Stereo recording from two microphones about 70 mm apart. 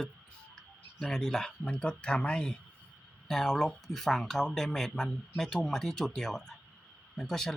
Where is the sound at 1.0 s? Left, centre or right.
Centre.